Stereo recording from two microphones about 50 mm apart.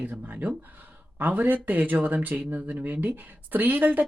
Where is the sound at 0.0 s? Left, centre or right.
Right.